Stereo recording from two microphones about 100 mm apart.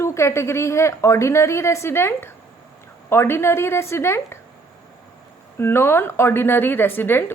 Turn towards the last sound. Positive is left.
turn(degrees=20)  # may be behind; listen again after turning